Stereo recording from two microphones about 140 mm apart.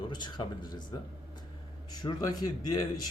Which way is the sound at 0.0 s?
30° left (ahead or behind).